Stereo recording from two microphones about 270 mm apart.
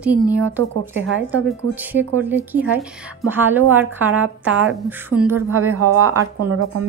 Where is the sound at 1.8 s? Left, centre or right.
Centre.